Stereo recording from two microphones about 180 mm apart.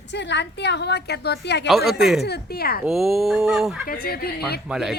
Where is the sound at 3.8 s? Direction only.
55° left (ahead or behind).